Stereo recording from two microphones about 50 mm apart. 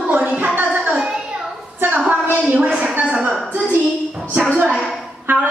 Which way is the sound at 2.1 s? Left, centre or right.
Right.